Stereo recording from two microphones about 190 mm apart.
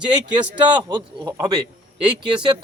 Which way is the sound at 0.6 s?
25° right (ahead or behind).